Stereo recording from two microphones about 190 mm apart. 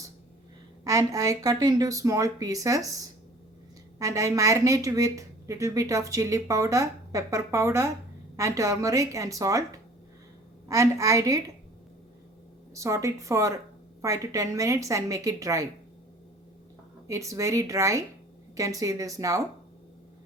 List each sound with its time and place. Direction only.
0.9 s a woman's voice: 15° right (ahead or behind)
3.9 s a woman's voice: 15° right (ahead or behind)
12.7 s a woman's voice: 15° right (ahead or behind)
17.1 s a woman's voice: 15° right (ahead or behind)